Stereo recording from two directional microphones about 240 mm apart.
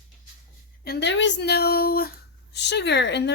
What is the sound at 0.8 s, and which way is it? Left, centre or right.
Speech, left.